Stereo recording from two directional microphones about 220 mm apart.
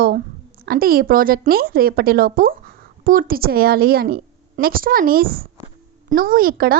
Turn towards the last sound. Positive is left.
turn(degrees=-40)  # may be behind; listen again after turning